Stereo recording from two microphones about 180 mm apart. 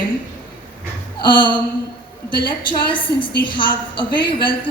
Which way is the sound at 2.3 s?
25° left (ahead or behind).